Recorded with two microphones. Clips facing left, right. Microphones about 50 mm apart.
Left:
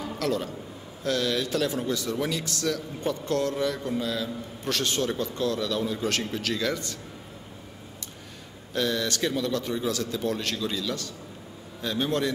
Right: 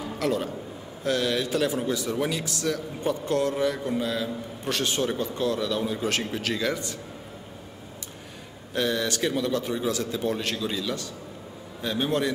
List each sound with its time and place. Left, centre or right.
0.2 s a man's voice: centre
8.7 s a man's voice: centre